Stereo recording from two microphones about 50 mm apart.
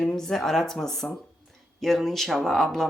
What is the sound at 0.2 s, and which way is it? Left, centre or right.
Speech, centre.